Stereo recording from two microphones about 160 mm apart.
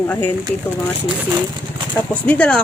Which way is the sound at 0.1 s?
10° left (ahead or behind).